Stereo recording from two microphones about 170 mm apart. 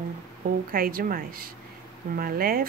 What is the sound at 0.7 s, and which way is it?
Speech, 60° right (ahead or behind).